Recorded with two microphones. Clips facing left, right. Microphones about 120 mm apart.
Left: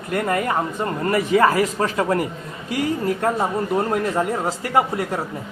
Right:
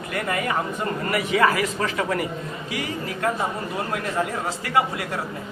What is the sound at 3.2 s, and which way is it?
A man's voice, 35° left (ahead or behind).